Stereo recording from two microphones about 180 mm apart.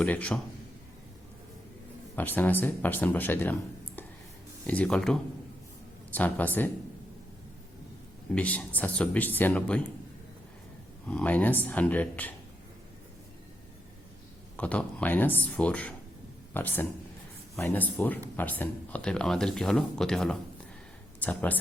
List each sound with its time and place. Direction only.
0.0 s speech: 5° left (ahead or behind)
2.1 s speech: 10° left (ahead or behind)
8.4 s speech: 10° left (ahead or behind)
11.1 s speech: 5° left (ahead or behind)
14.5 s speech: 10° left (ahead or behind)